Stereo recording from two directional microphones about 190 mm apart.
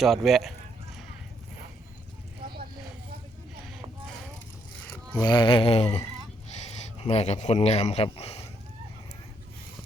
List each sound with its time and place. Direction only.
0.0 s speech: centre (ahead or behind)
5.2 s a sound: 25° left (ahead or behind)
6.7 s speech: 35° left (ahead or behind)